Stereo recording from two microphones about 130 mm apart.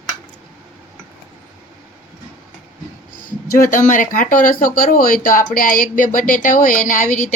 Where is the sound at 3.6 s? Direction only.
90° left.